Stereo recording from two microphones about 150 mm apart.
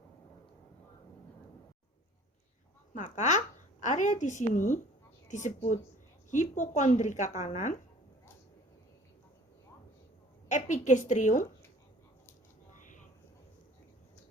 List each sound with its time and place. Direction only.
2.9 s a woman's voice: 50° left (ahead or behind)
10.5 s a woman's voice: 55° left (ahead or behind)
12.7 s a sound: 60° left (ahead or behind)